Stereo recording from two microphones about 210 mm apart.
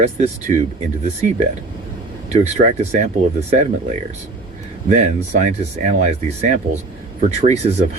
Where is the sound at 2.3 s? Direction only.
30° right (ahead or behind).